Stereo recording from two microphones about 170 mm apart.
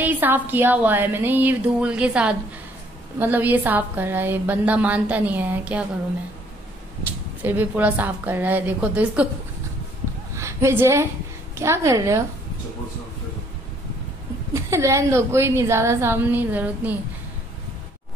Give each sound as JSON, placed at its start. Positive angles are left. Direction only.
{"t": 0.0, "sound": "a woman's voice", "side_deg": -10}
{"t": 7.0, "sound": "a woman's voice", "side_deg": -10}
{"t": 10.3, "sound": "a woman's voice", "side_deg": -15}
{"t": 14.5, "sound": "a woman's voice", "side_deg": -15}